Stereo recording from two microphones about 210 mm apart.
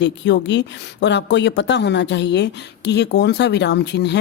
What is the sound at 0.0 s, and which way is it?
Speech, 55° left (ahead or behind).